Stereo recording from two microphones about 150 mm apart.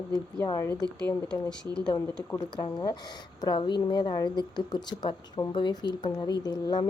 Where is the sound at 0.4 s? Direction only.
20° left (ahead or behind).